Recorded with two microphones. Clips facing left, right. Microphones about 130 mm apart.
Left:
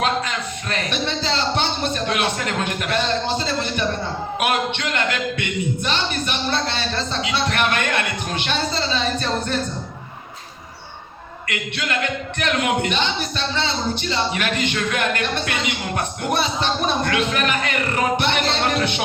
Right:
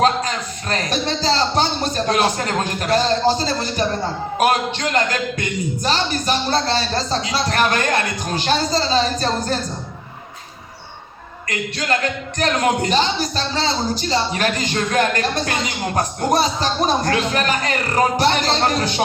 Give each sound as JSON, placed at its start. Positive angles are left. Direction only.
{"t": 0.0, "sound": "speech", "side_deg": -35}
{"t": 11.4, "sound": "speech", "side_deg": -35}